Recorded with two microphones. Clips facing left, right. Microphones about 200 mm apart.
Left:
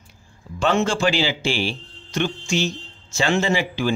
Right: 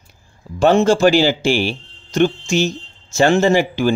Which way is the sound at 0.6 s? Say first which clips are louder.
Right 8 dB; 40° right (ahead or behind).